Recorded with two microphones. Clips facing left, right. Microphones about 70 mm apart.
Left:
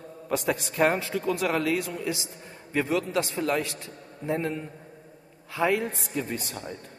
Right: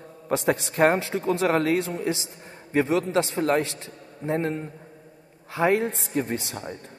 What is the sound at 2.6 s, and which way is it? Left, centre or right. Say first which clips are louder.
A man's voice: right 4 dB; right.